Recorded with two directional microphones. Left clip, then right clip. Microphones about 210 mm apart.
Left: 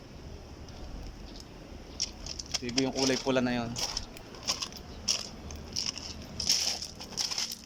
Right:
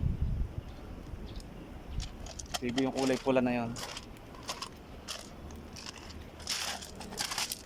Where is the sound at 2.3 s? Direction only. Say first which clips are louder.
Even; centre (ahead or behind).